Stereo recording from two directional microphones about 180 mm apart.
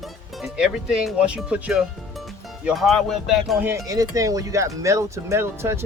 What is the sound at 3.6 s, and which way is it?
Speech, 15° right (ahead or behind).